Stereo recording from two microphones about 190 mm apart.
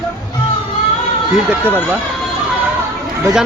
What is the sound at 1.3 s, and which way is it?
Speech, 10° right (ahead or behind).